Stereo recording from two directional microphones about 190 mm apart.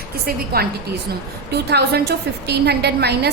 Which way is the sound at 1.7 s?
60° right (ahead or behind).